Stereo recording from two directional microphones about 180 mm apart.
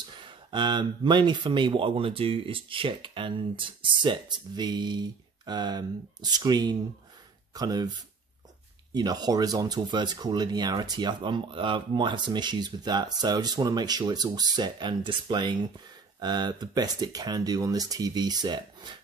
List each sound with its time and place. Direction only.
0.1 s speech: 25° right (ahead or behind)
8.9 s speech: 20° right (ahead or behind)